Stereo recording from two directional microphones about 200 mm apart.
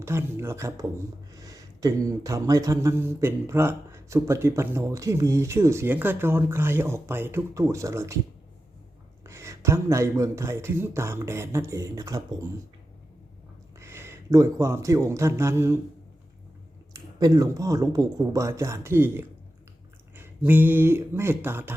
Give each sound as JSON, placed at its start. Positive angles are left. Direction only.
{"t": 0.0, "sound": "speech", "side_deg": -15}
{"t": 9.2, "sound": "speech", "side_deg": -15}
{"t": 13.7, "sound": "a man's voice", "side_deg": -15}
{"t": 16.9, "sound": "speech", "side_deg": -20}